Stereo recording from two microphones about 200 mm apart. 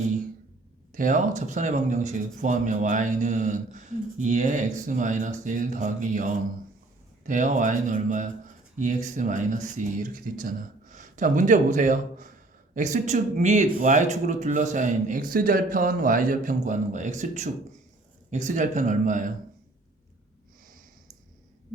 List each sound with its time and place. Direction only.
0.9 s speech: 40° right (ahead or behind)